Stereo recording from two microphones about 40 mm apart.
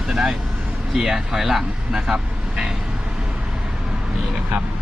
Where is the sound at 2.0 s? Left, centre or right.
Centre.